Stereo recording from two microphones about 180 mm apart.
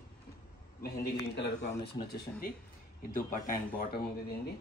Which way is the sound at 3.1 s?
45° left (ahead or behind).